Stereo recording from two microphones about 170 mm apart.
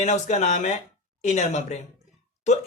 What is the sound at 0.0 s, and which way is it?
Speech, 45° left (ahead or behind).